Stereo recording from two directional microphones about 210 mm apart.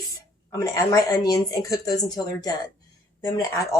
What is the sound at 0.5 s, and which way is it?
Speech, 15° left (ahead or behind).